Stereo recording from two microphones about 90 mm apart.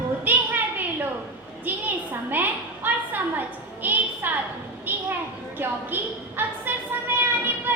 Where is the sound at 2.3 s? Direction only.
20° right (ahead or behind).